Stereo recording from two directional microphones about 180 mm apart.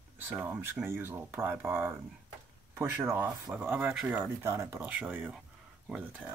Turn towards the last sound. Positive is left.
turn(degrees=-5)  # may be behind; listen again after turning